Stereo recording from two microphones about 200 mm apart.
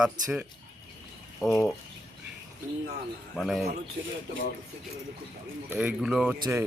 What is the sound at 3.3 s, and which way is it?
Speech, centre (ahead or behind).